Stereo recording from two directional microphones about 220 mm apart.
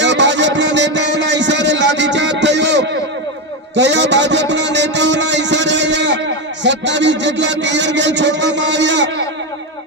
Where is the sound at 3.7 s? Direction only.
55° right (ahead or behind).